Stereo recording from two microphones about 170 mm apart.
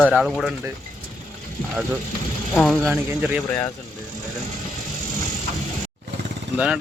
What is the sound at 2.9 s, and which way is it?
Speech, 10° right (ahead or behind).